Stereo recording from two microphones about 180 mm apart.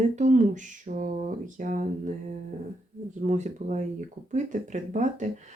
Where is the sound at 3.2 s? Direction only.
40° right (ahead or behind).